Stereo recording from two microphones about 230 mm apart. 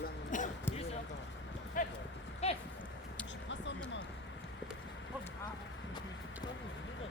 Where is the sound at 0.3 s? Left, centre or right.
Left.